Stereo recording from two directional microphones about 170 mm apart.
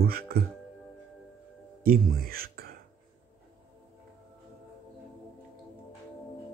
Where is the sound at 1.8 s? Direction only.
60° right (ahead or behind).